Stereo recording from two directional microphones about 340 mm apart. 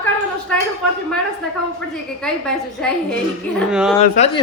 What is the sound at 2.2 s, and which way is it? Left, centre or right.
A man's voice, centre.